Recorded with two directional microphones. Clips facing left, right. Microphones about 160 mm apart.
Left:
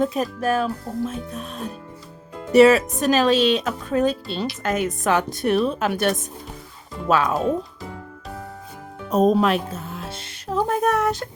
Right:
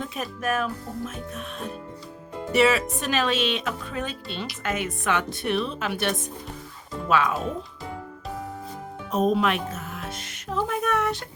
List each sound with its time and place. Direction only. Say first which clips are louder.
0.0 s speech: left 8 dB; 40° left (ahead or behind)
9.0 s music: left 5 dB; 40° left (ahead or behind)